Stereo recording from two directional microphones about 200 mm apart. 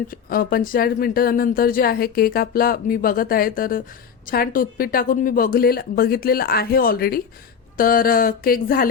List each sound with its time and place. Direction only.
0.1 s speech: 45° left (ahead or behind)